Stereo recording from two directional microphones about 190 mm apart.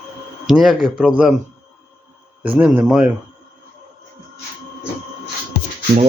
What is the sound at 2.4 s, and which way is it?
Speech, 5° right (ahead or behind).